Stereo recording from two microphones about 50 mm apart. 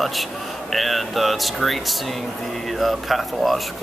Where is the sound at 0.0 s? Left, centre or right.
Centre.